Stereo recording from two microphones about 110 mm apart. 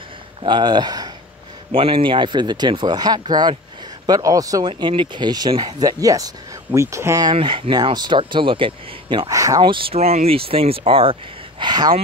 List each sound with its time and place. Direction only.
0.4 s speech: 45° right (ahead or behind)
1.7 s speech: 55° right (ahead or behind); by 7.2 s 25° right (ahead or behind)
7.3 s speech: 55° right (ahead or behind)
9.3 s speech: 30° right (ahead or behind)
9.6 s speech: 50° right (ahead or behind)
9.9 s speech: 75° right (ahead or behind); by 11.1 s 55° right (ahead or behind)
11.6 s speech: 40° right (ahead or behind)